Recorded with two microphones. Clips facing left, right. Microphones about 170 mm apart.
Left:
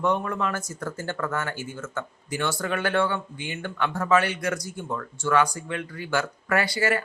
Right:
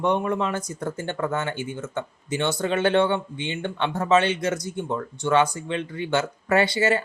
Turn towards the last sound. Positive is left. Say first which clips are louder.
# right 4 dB
turn(degrees=-25)  # may be behind; listen again after turning